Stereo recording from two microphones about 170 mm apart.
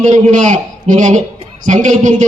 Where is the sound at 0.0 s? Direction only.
45° right (ahead or behind).